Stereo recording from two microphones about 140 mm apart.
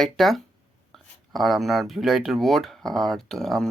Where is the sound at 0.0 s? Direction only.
Centre (ahead or behind).